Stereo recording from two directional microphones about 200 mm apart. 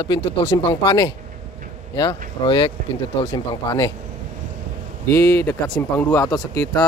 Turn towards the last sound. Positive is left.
turn(degrees=15)  # may be behind; listen again after turning